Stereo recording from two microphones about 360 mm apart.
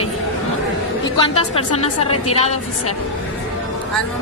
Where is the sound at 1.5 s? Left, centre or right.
Centre.